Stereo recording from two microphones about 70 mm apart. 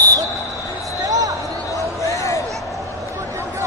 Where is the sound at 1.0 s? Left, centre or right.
Right.